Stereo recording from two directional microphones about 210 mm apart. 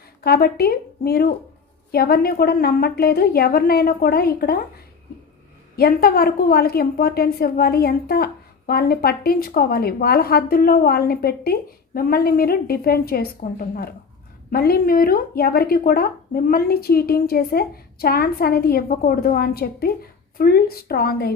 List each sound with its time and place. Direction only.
0.2 s a woman's voice: 45° left (ahead or behind)
5.7 s a woman's voice: 45° left (ahead or behind)